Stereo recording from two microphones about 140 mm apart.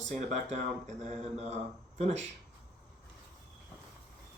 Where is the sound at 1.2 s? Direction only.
55° right (ahead or behind).